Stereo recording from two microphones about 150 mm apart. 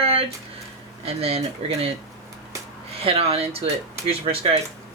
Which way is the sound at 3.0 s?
40° right (ahead or behind).